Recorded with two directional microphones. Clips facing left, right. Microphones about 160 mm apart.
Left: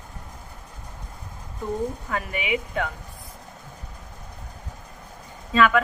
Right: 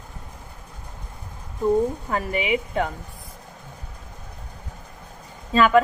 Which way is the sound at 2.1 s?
30° right (ahead or behind).